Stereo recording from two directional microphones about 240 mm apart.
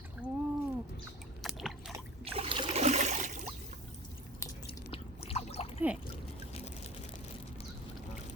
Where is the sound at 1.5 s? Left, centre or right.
Centre.